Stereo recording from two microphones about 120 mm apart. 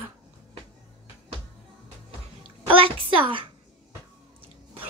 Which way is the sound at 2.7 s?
50° right (ahead or behind).